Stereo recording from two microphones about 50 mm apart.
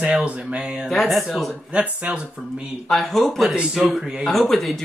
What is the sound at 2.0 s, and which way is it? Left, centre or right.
Speech, right.